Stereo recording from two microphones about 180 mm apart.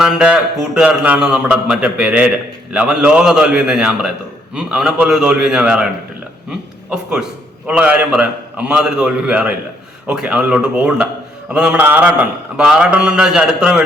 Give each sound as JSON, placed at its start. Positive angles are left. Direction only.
{"t": 0.0, "sound": "a man's voice", "side_deg": -5}